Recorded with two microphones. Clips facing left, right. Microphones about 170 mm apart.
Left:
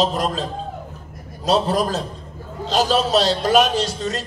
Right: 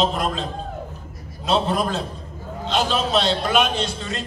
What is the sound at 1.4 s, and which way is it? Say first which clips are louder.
A man's voice: left 2 dB; 40° left (ahead or behind).